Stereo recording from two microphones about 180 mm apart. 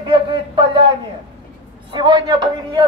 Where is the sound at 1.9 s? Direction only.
25° right (ahead or behind).